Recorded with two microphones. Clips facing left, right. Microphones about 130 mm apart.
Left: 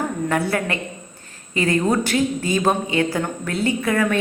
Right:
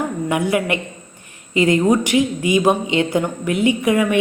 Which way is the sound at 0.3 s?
15° right (ahead or behind).